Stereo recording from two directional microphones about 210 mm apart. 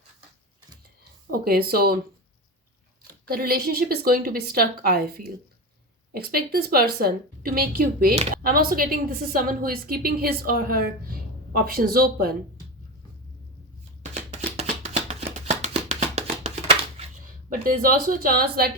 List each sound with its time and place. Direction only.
1.3 s a woman's voice: 45° right (ahead or behind)
3.2 s a woman's voice: 45° right (ahead or behind)
14.0 s a sound: 30° right (ahead or behind)
17.5 s a woman's voice: 40° right (ahead or behind)